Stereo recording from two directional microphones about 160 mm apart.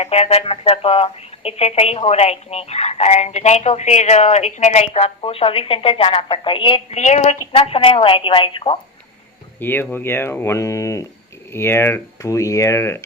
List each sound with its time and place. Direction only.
0.0 s speech: 40° left (ahead or behind)
7.0 s speech: 45° left (ahead or behind)
9.6 s speech: 10° left (ahead or behind)